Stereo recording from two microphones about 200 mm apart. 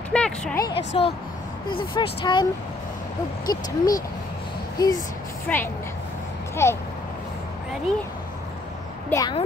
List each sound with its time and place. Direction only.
0.1 s speech: 5° left (ahead or behind)
0.7 s speech: 30° left (ahead or behind)
3.4 s speech: 20° left (ahead or behind)
5.5 s speech: 5° left (ahead or behind)
9.1 s speech: 20° left (ahead or behind)